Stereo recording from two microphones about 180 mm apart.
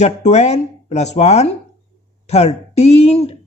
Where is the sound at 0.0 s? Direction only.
40° left (ahead or behind).